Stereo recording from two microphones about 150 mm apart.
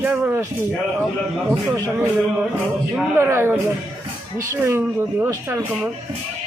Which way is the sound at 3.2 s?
15° right (ahead or behind).